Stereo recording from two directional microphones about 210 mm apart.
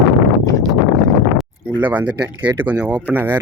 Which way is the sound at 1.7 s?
10° right (ahead or behind).